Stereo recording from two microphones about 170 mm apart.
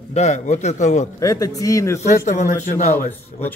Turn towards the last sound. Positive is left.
turn(degrees=15)  # may be behind; listen again after turning